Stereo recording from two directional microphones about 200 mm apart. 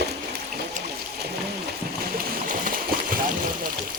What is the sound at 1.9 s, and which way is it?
Splash, 45° right (ahead or behind).